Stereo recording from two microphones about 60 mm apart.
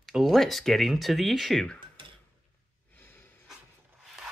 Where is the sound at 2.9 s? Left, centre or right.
Left.